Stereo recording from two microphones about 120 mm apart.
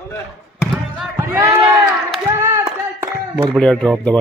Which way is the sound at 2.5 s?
25° right (ahead or behind).